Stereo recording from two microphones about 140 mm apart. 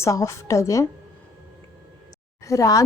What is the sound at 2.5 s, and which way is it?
Speech, 25° left (ahead or behind).